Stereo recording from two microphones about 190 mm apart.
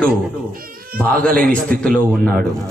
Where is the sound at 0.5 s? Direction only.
50° right (ahead or behind).